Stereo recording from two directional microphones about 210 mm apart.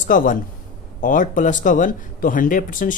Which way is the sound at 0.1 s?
40° left (ahead or behind).